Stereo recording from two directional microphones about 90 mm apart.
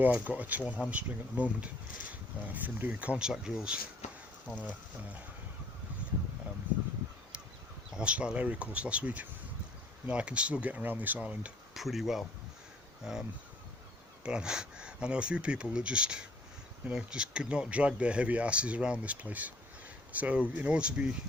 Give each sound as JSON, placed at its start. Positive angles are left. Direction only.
{"t": 0.0, "sound": "speech", "side_deg": -20}
{"t": 4.4, "sound": "speech", "side_deg": 15}
{"t": 7.3, "sound": "a sound", "side_deg": -10}
{"t": 7.9, "sound": "speech", "side_deg": -10}
{"t": 11.7, "sound": "speech", "side_deg": 0}
{"t": 14.3, "sound": "speech", "side_deg": -10}